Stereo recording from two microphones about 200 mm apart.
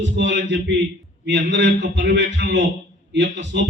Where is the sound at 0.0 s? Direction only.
65° right (ahead or behind).